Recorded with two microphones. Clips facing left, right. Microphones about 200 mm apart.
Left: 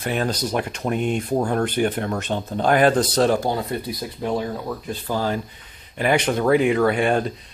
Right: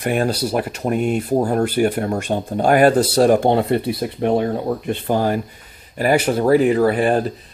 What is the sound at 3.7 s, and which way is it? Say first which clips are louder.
Speech: right 8 dB; 65° right (ahead or behind).